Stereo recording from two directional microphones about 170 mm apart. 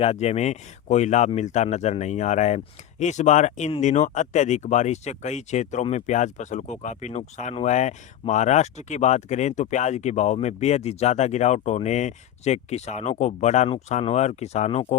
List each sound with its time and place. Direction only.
0.0 s speech: 40° left (ahead or behind)